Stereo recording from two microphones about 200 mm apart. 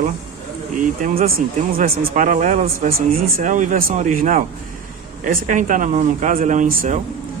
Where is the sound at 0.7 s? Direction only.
40° right (ahead or behind).